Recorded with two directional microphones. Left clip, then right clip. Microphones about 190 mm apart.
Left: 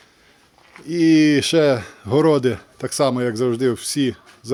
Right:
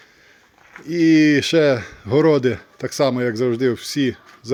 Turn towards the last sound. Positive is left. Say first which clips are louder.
# even
turn(degrees=0)  # may be behind; listen again after turning